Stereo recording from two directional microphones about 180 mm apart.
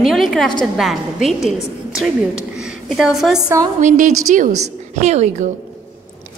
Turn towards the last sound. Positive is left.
turn(degrees=-40)  # may be behind; listen again after turning